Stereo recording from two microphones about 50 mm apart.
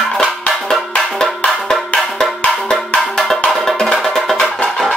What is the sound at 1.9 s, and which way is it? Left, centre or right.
Music, centre.